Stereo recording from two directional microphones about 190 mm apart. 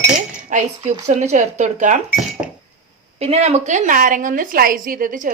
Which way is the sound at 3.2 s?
35° right (ahead or behind).